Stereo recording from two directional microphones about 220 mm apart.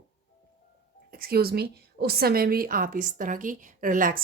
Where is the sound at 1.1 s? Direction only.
40° right (ahead or behind).